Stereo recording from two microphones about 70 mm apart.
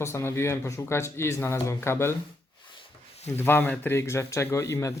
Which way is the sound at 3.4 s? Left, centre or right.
Left.